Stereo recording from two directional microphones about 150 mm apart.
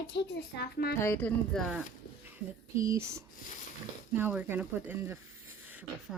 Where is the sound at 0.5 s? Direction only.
90° left.